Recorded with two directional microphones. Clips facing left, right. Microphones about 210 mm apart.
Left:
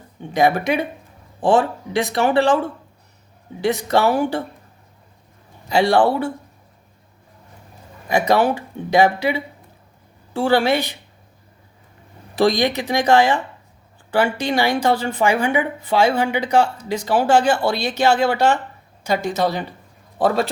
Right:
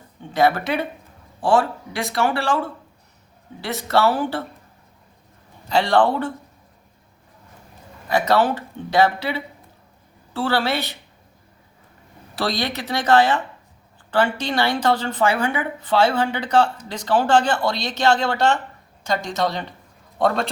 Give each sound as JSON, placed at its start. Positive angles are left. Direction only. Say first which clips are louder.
{"t": 0.3, "sound": "a woman's voice", "louder": "left 2 dB", "side_deg": 15}
{"t": 5.6, "sound": "a woman's voice", "louder": "left 2 dB", "side_deg": 10}
{"t": 8.0, "sound": "a woman's voice", "louder": "left 2 dB", "side_deg": 15}
{"t": 12.4, "sound": "a woman's voice", "louder": "left 7 dB", "side_deg": 15}